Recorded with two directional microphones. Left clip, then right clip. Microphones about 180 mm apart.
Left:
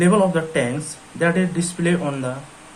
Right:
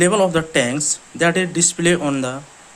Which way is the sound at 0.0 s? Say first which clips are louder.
Right 2 dB; 65° right (ahead or behind).